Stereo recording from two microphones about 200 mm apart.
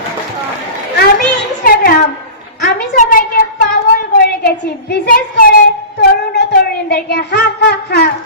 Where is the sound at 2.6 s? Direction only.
45° left (ahead or behind).